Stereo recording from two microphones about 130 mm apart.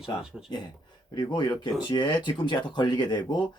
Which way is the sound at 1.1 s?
35° left (ahead or behind).